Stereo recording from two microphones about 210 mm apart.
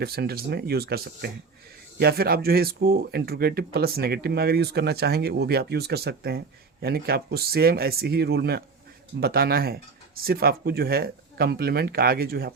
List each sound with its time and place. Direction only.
0.0 s speech: 50° right (ahead or behind)